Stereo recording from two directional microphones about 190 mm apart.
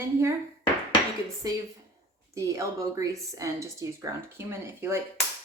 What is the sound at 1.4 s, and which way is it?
A woman's voice, 20° right (ahead or behind).